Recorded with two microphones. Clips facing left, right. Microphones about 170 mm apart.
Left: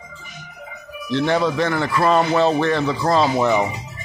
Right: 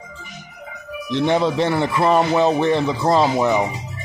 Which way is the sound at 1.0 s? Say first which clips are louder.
Right 1 dB; 20° right (ahead or behind).